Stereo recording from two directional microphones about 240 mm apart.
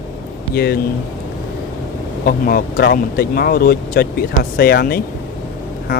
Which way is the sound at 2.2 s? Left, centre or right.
Left.